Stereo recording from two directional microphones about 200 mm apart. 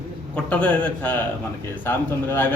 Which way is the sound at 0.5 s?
5° left (ahead or behind).